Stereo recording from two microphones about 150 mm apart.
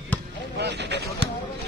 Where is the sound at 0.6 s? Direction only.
90° right.